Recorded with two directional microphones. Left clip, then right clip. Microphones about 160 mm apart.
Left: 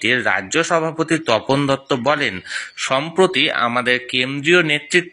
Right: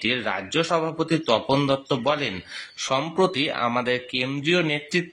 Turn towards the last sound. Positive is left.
turn(degrees=15)  # may be behind; listen again after turning